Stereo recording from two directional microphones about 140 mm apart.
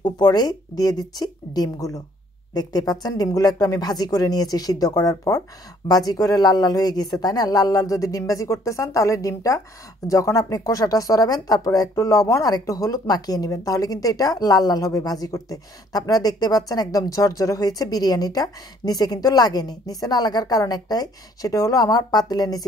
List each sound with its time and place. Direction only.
0.0 s speech: 30° left (ahead or behind)